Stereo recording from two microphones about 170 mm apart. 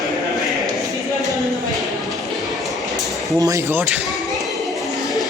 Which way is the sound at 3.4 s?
20° right (ahead or behind).